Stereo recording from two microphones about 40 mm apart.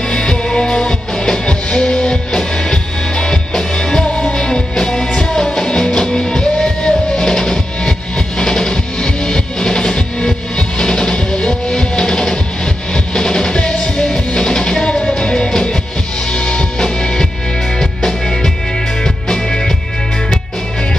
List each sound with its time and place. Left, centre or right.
0.1 s music: centre